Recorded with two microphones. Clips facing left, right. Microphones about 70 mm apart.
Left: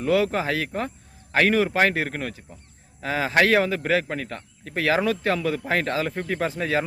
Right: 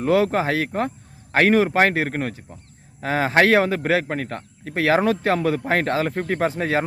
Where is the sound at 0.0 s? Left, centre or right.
Right.